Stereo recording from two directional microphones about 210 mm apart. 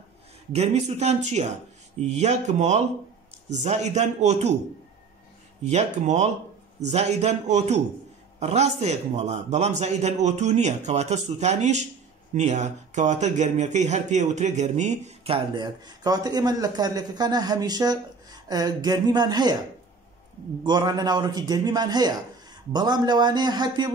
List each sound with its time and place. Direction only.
0.5 s a man's voice: 30° right (ahead or behind)
5.6 s a man's voice: 35° right (ahead or behind)
20.6 s speech: 20° right (ahead or behind)